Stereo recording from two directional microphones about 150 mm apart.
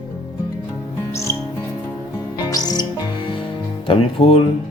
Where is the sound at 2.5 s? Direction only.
25° left (ahead or behind).